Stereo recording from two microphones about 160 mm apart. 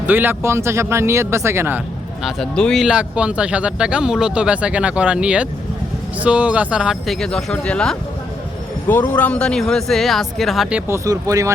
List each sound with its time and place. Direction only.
0.1 s speech: 10° right (ahead or behind)
2.2 s a man's voice: 5° left (ahead or behind); by 11.5 s 20° right (ahead or behind)